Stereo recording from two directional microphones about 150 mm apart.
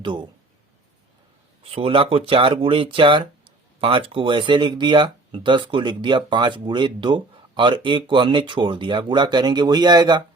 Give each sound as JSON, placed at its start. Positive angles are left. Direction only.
{"t": 0.0, "sound": "speech", "side_deg": -30}
{"t": 1.6, "sound": "speech", "side_deg": -40}